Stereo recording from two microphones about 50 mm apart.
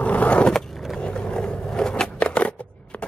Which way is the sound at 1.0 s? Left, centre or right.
Left.